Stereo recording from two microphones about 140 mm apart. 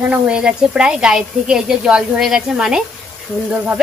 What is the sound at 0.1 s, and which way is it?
Speech, 5° right (ahead or behind).